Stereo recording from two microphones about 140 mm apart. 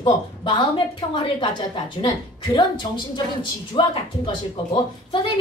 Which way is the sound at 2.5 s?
30° left (ahead or behind).